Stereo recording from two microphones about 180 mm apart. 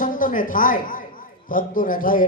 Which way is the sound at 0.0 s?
50° left (ahead or behind).